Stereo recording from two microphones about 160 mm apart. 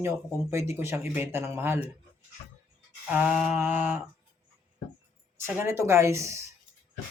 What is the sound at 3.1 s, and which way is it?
Mantra, 5° right (ahead or behind).